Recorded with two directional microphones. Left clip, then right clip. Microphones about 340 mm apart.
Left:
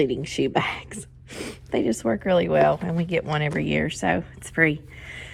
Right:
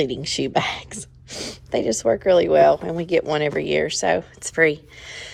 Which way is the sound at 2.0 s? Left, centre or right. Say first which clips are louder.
Right 7 dB; centre.